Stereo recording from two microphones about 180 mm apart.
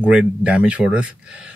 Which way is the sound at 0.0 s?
5° right (ahead or behind).